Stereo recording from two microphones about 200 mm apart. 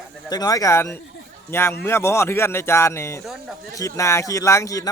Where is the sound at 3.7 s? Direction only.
15° left (ahead or behind).